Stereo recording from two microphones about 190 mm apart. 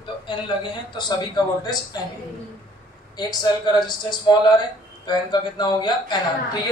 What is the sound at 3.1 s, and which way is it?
Speech, 20° left (ahead or behind).